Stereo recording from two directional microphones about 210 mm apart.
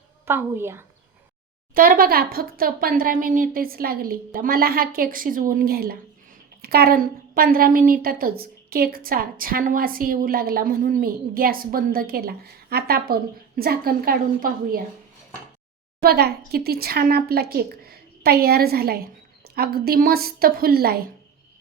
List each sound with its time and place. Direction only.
0.3 s a woman's voice: 10° right (ahead or behind)
1.7 s a woman's voice: 45° right (ahead or behind)
16.0 s a woman's voice: 50° right (ahead or behind)